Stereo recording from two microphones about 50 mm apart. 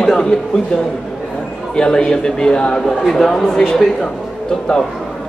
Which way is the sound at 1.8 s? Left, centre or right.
Centre.